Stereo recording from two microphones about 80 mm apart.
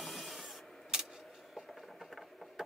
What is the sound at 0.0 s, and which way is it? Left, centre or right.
Printer, centre.